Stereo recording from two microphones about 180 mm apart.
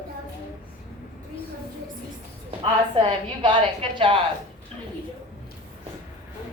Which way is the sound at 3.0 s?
25° right (ahead or behind).